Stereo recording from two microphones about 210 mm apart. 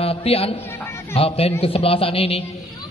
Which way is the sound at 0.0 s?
25° left (ahead or behind).